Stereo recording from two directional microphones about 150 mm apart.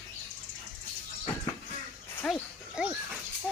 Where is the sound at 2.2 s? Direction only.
Centre (ahead or behind).